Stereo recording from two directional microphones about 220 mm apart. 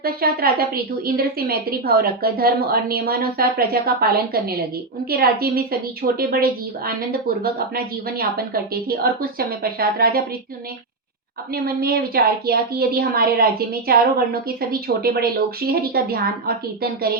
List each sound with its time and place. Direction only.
0.0 s a woman's voice: 45° right (ahead or behind)
11.5 s a woman's voice: 45° right (ahead or behind)